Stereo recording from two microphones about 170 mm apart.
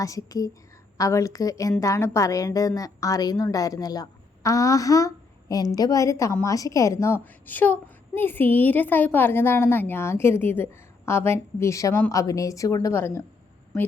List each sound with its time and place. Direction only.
0.0 s a woman's voice: 20° left (ahead or behind)